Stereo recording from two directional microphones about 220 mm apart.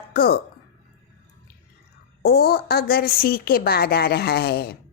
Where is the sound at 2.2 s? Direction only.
45° left (ahead or behind).